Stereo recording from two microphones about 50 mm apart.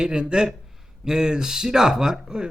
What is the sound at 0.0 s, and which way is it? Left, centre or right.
A man's voice, centre.